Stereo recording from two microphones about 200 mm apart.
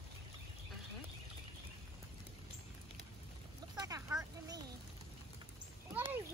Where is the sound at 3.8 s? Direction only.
15° right (ahead or behind).